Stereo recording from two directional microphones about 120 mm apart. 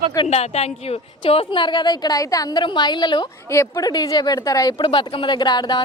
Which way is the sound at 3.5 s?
25° left (ahead or behind).